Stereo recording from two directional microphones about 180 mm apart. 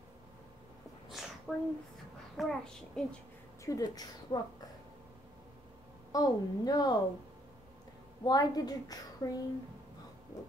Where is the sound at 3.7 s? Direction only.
20° left (ahead or behind).